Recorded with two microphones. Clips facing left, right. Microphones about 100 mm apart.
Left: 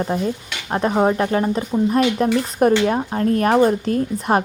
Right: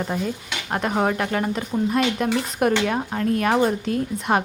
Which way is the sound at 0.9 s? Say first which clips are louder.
Left 5 dB; 30° left (ahead or behind).